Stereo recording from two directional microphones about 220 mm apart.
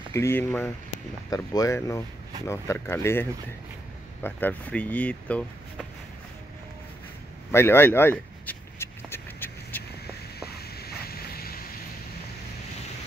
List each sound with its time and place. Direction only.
0.1 s speech: 10° left (ahead or behind)
7.5 s a sound: 10° left (ahead or behind)
10.8 s boat: 45° left (ahead or behind)